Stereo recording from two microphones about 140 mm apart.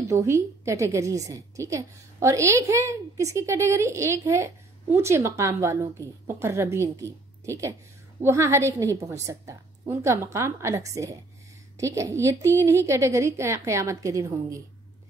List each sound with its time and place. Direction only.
0.1 s a woman's voice: 20° right (ahead or behind)